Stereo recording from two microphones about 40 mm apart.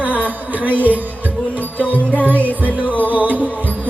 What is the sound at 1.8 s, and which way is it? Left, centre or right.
Music, left.